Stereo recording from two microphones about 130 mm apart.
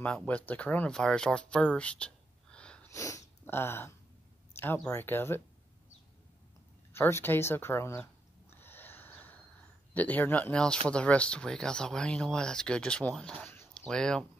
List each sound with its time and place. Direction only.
0.3 s speech: 10° left (ahead or behind)
2.9 s speech: 25° left (ahead or behind)
6.9 s speech: 20° left (ahead or behind)
8.5 s snort: 15° left (ahead or behind)
9.9 s speech: 15° left (ahead or behind)